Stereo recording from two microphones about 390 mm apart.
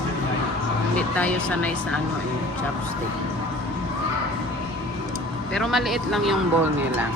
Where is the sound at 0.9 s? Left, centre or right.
Centre.